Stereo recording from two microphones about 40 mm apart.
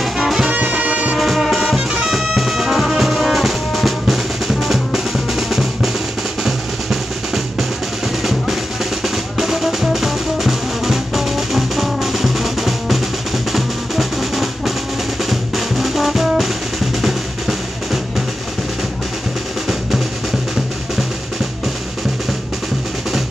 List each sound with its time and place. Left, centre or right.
0.5 s music: right
1.1 s music: centre
1.8 s music: centre
2.0 s music: centre
6.4 s drum: centre
8.2 s percussion: centre
9.0 s music: centre
13.5 s drum: centre
15.2 s music: centre